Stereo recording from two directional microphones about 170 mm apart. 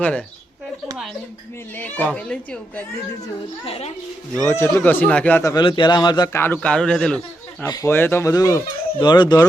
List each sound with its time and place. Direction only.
0.0 s a man's voice: 5° left (ahead or behind)
1.8 s a man's voice: 10° left (ahead or behind)
3.7 s a woman's voice: 40° left (ahead or behind)
4.4 s a man's voice: 15° left (ahead or behind)
7.7 s speech: 15° left (ahead or behind)